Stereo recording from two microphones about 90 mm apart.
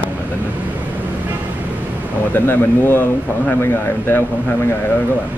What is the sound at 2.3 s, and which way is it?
Speech, 25° left (ahead or behind).